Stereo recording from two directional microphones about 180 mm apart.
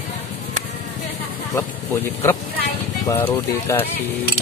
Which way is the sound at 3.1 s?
10° left (ahead or behind).